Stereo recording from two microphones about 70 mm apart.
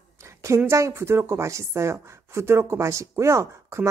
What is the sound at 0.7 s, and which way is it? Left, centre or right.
Speech, right.